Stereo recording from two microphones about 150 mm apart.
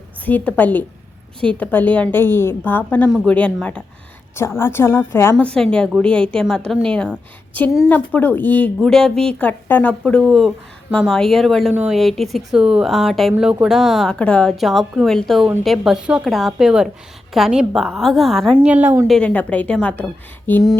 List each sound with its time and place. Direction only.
0.3 s a woman's voice: 10° left (ahead or behind)
11.7 s a woman's voice: 10° right (ahead or behind)
11.9 s a woman's voice: centre (ahead or behind)
18.6 s a woman's voice: 10° right (ahead or behind)
19.0 s a woman's voice: 5° left (ahead or behind)